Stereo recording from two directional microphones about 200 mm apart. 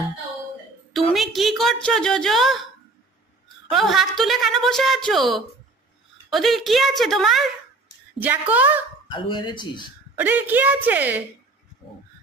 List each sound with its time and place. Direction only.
1.1 s a woman's voice: centre (ahead or behind)
3.7 s a woman's voice: centre (ahead or behind)
9.1 s speech: 25° left (ahead or behind)
10.1 s a woman's voice: 10° right (ahead or behind)